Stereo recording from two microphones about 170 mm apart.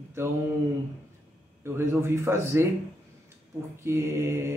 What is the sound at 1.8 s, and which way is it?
Speech, 15° right (ahead or behind).